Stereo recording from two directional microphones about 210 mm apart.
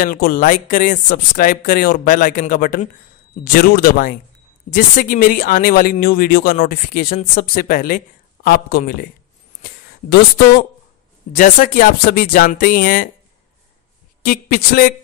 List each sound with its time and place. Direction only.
0.0 s speech: 40° left (ahead or behind)
9.6 s a sound: 50° left (ahead or behind)
11.3 s speech: 40° left (ahead or behind)
14.2 s speech: 45° left (ahead or behind)